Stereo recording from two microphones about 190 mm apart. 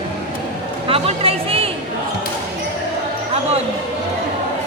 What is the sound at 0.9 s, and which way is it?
Chatter, 30° right (ahead or behind).